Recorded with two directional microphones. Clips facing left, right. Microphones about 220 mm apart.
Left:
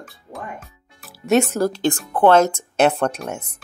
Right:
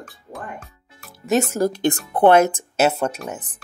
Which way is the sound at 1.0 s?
Centre (ahead or behind).